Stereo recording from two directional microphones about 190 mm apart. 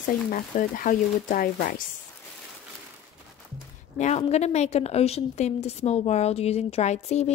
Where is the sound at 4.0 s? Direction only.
35° left (ahead or behind).